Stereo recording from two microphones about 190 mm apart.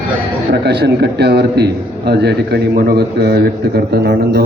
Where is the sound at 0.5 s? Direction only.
60° right (ahead or behind).